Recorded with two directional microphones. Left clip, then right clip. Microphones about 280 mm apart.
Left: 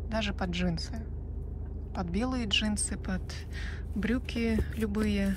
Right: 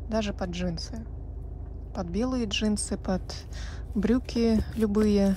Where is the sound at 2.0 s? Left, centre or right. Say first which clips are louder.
Right 4 dB; centre.